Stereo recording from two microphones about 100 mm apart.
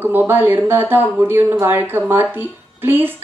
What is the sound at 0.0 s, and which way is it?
A woman's voice, 20° right (ahead or behind).